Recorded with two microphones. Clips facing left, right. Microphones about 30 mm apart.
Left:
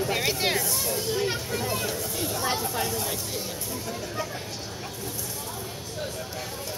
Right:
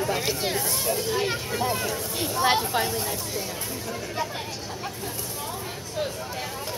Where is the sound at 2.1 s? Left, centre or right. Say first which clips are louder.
Right 8 dB; right.